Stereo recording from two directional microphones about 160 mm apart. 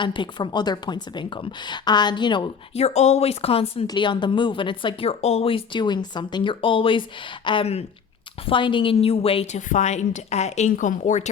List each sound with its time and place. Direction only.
0.0 s a woman's voice: 30° left (ahead or behind); by 11.3 s 50° left (ahead or behind)